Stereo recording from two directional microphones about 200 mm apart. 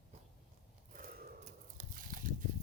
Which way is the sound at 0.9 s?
45° right (ahead or behind).